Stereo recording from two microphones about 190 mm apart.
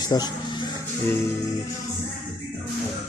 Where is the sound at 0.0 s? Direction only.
20° left (ahead or behind).